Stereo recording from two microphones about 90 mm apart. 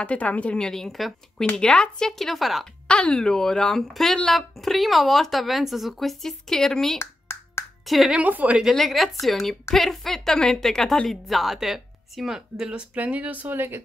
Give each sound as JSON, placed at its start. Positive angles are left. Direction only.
{"t": 0.0, "sound": "a woman's voice", "side_deg": 15}
{"t": 7.0, "sound": "finger snapping", "side_deg": 30}
{"t": 7.8, "sound": "speech", "side_deg": 0}
{"t": 8.1, "sound": "a woman's voice", "side_deg": -15}
{"t": 8.6, "sound": "speech", "side_deg": 0}